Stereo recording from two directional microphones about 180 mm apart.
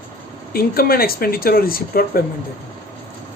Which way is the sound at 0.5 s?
55° left (ahead or behind).